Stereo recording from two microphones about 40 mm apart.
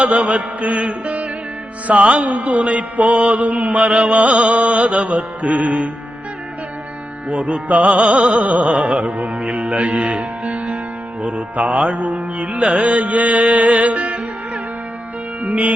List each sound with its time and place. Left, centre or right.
0.0 s music: right
1.9 s mantra: right
2.6 s music: right
3.3 s mantra: right
7.3 s mantra: right
8.7 s music: right
9.0 s mantra: right
10.4 s music: right
11.3 s mantra: right
15.4 s music: right